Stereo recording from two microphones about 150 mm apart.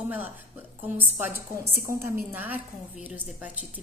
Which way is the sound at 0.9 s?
15° right (ahead or behind).